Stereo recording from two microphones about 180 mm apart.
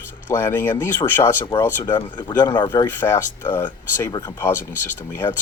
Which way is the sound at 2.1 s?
20° left (ahead or behind).